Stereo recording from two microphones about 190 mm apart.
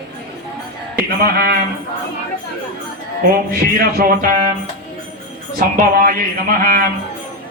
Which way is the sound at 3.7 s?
50° right (ahead or behind).